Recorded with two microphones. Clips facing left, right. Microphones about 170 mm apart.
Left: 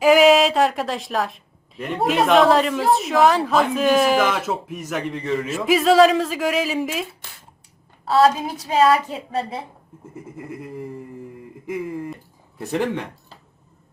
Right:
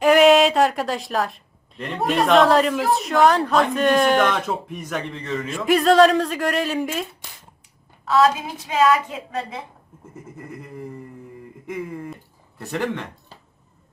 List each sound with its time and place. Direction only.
0.0 s a sound: centre (ahead or behind)
2.0 s speech: centre (ahead or behind)
8.0 s a woman's voice: 35° left (ahead or behind)
10.2 s speech: centre (ahead or behind)
12.7 s speech: 15° left (ahead or behind)